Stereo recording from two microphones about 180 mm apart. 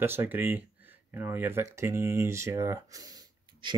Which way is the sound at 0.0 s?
10° right (ahead or behind).